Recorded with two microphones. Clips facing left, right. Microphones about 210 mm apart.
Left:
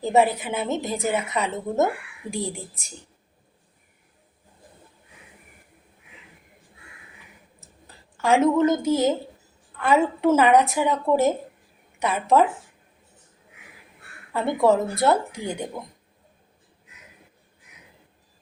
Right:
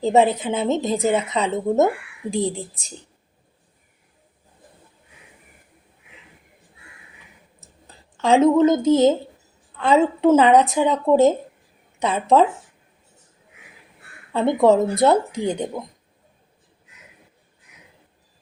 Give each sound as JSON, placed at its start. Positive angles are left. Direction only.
{"t": 0.0, "sound": "speech", "side_deg": -20}
{"t": 8.2, "sound": "speech", "side_deg": -20}
{"t": 14.3, "sound": "speech", "side_deg": -20}